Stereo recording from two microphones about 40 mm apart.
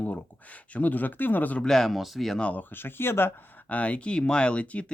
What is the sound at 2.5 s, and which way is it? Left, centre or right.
Speech, left.